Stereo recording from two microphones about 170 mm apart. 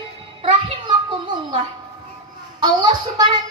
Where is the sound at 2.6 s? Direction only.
25° right (ahead or behind).